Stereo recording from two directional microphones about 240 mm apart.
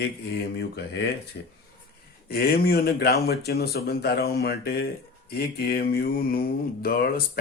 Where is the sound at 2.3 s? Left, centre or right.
Left.